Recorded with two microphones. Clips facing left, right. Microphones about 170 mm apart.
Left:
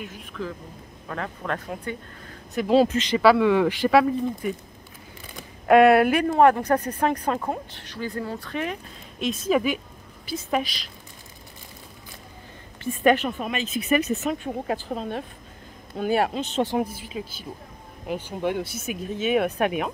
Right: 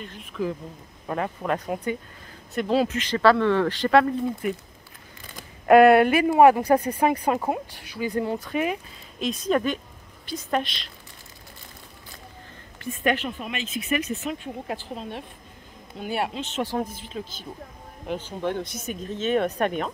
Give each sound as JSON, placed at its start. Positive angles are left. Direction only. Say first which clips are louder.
{"t": 0.0, "sound": "a woman's voice", "louder": "left 2 dB", "side_deg": 0}
{"t": 1.0, "sound": "speech", "louder": "right 4 dB", "side_deg": -15}
{"t": 2.7, "sound": "speech", "louder": "left 4 dB", "side_deg": 35}
{"t": 3.0, "sound": "speech", "louder": "left 2 dB", "side_deg": 10}
{"t": 5.3, "sound": "a sound", "louder": "right 1 dB", "side_deg": 0}
{"t": 6.2, "sound": "speech", "louder": "right 2 dB", "side_deg": -10}
{"t": 9.2, "sound": "a woman's voice", "louder": "left 1 dB", "side_deg": 5}
{"t": 13.2, "sound": "speech", "louder": "left 4 dB", "side_deg": 45}
{"t": 16.6, "sound": "speech", "louder": "left 3 dB", "side_deg": 10}